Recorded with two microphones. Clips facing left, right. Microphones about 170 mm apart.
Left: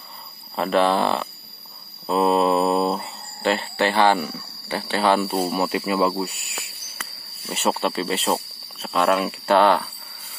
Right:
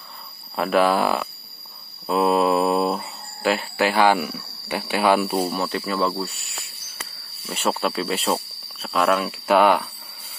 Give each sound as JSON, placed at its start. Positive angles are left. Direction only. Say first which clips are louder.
{"t": 0.6, "sound": "speech", "louder": "even", "side_deg": -5}
{"t": 2.0, "sound": "a sound", "louder": "even", "side_deg": -5}
{"t": 5.3, "sound": "speech", "louder": "even", "side_deg": 0}
{"t": 5.6, "sound": "speech", "louder": "left 3 dB", "side_deg": 15}
{"t": 7.4, "sound": "speech", "louder": "left 1 dB", "side_deg": 5}